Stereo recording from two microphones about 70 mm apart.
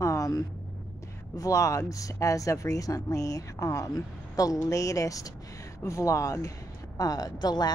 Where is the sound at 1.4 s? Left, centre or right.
Left.